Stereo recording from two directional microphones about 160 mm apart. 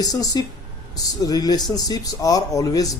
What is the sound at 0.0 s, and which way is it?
Speech, 25° left (ahead or behind).